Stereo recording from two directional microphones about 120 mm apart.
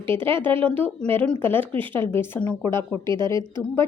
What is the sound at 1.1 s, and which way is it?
A woman's voice, 15° left (ahead or behind).